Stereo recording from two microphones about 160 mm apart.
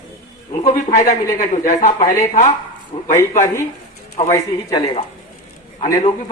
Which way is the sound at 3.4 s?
15° left (ahead or behind).